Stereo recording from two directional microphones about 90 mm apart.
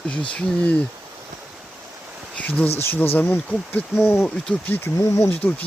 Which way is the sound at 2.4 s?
15° left (ahead or behind).